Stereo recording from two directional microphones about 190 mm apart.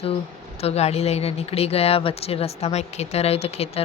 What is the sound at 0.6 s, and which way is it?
Speech, 35° left (ahead or behind).